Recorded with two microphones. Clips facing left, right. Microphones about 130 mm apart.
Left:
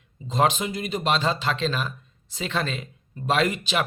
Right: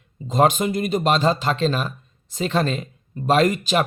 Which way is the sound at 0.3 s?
50° right (ahead or behind).